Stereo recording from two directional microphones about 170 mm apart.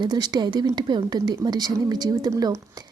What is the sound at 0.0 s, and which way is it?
Speech, 25° right (ahead or behind).